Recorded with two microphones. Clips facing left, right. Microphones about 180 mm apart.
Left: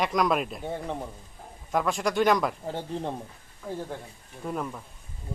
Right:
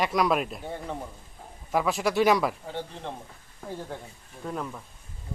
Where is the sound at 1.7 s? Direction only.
5° right (ahead or behind).